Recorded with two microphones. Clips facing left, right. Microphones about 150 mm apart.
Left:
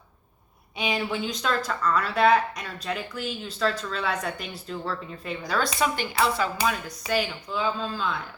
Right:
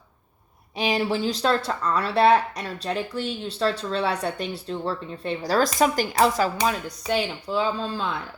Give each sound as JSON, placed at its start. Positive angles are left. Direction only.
{"t": 0.8, "sound": "speech", "side_deg": -35}